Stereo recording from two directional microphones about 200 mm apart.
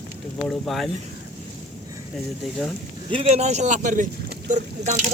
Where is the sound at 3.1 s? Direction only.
35° right (ahead or behind).